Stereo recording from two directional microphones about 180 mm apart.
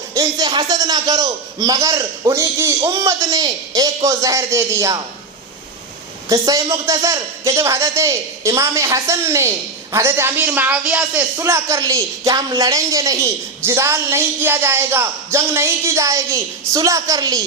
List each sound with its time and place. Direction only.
0.1 s a man's voice: 20° right (ahead or behind)
6.2 s a man's voice: 20° right (ahead or behind)